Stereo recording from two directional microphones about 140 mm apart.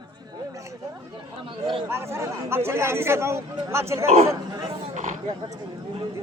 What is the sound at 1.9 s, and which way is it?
Speech, 20° right (ahead or behind).